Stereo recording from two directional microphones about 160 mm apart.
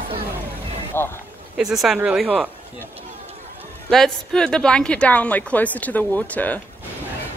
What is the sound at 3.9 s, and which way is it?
A woman's voice, 5° left (ahead or behind).